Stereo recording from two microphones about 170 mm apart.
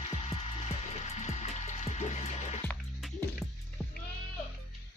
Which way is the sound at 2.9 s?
Centre (ahead or behind).